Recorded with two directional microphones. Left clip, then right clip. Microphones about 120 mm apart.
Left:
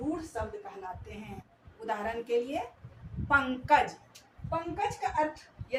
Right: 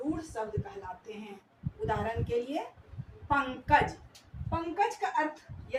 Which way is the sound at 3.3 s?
20° left (ahead or behind).